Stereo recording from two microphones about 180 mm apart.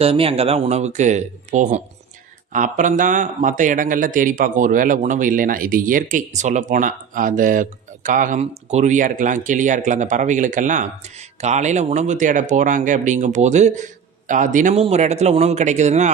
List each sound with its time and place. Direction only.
0.0 s speech: 35° right (ahead or behind)